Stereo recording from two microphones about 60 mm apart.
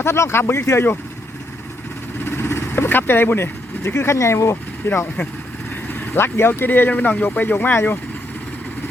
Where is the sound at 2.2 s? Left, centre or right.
Left.